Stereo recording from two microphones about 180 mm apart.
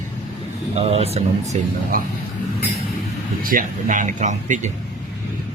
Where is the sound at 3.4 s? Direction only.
50° right (ahead or behind).